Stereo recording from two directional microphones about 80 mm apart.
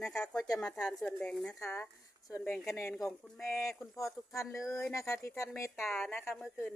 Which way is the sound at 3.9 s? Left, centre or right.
Left.